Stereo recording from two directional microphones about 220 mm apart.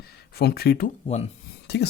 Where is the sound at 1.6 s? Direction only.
50° left (ahead or behind).